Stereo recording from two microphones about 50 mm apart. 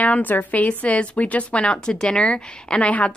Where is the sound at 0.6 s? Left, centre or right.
Left.